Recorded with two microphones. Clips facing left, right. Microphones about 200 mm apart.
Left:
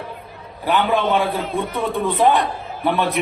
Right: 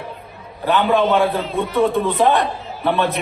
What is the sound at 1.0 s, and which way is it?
Speech, 50° left (ahead or behind).